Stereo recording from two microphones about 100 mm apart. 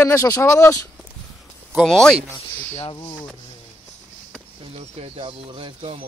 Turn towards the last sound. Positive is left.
turn(degrees=-70)  # may be behind; listen again after turning